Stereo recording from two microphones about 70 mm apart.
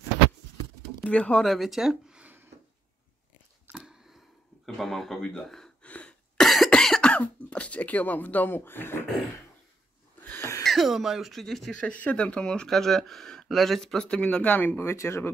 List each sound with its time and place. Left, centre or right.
1.0 s speech: centre
1.4 s speech: centre
3.7 s a sound: centre
4.6 s a man's voice: centre
5.4 s gasp: centre
5.9 s cough: centre
6.3 s cough: centre
6.7 s speech: centre; by 9.0 s left
10.6 s speech: centre
11.7 s speech: centre
15.0 s speech: left